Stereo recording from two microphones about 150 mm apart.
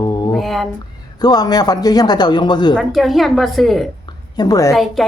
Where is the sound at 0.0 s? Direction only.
25° left (ahead or behind).